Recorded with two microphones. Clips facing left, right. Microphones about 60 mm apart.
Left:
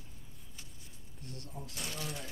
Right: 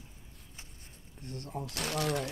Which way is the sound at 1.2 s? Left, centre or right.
Right.